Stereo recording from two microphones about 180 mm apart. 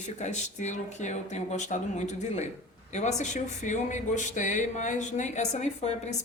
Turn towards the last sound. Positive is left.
turn(degrees=40)  # may be behind; listen again after turning